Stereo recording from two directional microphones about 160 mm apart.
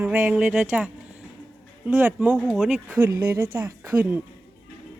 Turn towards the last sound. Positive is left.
turn(degrees=-10)  # may be behind; listen again after turning